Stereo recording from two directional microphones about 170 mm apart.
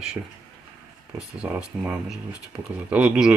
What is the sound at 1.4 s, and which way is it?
Speech, 10° right (ahead or behind).